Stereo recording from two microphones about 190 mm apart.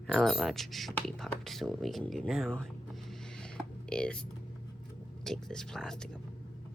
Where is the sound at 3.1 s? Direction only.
5° left (ahead or behind).